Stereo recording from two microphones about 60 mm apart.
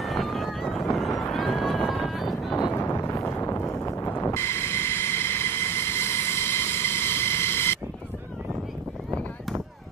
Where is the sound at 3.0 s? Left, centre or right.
Left.